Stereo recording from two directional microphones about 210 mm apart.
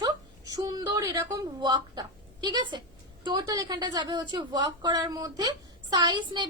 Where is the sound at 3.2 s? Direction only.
20° right (ahead or behind).